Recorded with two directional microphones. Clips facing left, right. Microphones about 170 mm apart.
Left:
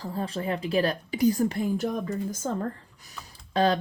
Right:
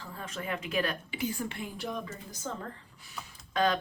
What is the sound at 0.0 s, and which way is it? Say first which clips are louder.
Speech: left 9 dB; 35° left (ahead or behind).